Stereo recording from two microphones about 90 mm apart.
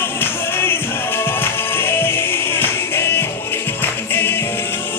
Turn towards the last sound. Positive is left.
turn(degrees=25)  # may be behind; listen again after turning